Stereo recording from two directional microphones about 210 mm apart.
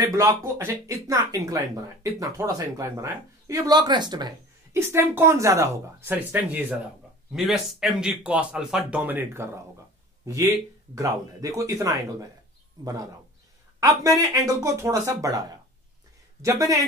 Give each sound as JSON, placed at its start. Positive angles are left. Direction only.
{"t": 0.0, "sound": "speech", "side_deg": -15}
{"t": 13.7, "sound": "speech", "side_deg": -15}